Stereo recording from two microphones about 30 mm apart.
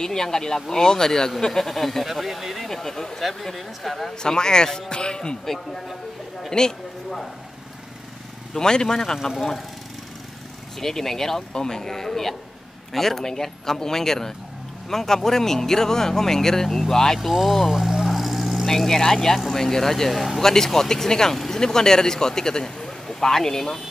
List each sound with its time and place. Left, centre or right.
0.0 s speech: centre
2.7 s speech: centre
3.2 s speech: centre
4.2 s speech: left
5.4 s speech: centre
8.5 s speech: left
10.8 s speech: centre
17.5 s vehicle: centre
18.7 s speech: centre
20.4 s speech: centre